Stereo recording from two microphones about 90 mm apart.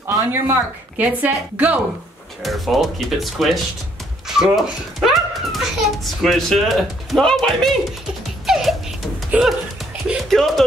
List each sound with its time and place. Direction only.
0.0 s speech: 30° right (ahead or behind)
2.4 s a child's voice: centre (ahead or behind)
8.5 s music: 5° right (ahead or behind)
9.3 s speech: 15° right (ahead or behind)
10.3 s a child's voice: centre (ahead or behind)